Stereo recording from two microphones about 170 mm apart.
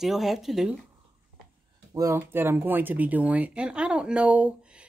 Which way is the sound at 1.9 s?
15° right (ahead or behind).